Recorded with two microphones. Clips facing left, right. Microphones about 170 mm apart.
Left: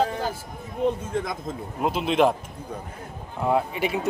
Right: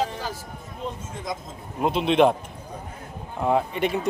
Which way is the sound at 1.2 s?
55° left (ahead or behind).